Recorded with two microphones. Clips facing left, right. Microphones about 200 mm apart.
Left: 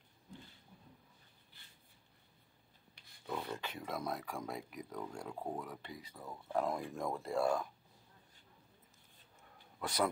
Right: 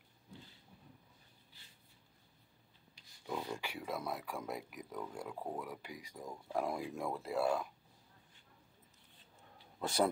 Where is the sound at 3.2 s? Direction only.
15° right (ahead or behind).